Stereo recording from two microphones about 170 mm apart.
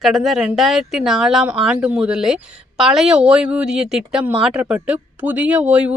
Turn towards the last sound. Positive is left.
turn(degrees=-5)  # may be behind; listen again after turning